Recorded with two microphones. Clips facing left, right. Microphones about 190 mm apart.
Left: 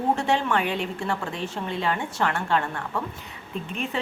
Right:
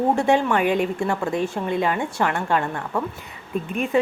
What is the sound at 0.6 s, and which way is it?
Speech, 50° right (ahead or behind).